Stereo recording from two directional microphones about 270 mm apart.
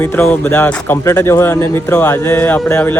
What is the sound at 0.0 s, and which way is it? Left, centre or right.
Speech, centre.